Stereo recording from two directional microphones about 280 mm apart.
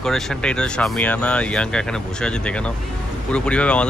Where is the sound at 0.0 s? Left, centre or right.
Centre.